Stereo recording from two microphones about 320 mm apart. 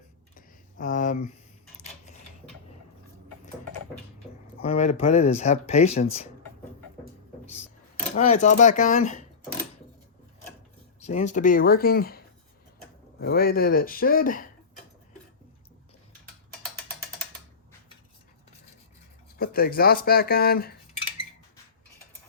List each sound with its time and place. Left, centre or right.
0.3 s a sound: left
4.6 s speech: centre
8.1 s speech: left
11.0 s speech: left
19.4 s speech: left